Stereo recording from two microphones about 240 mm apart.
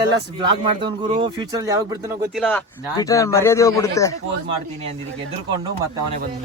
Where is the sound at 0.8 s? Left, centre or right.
Right.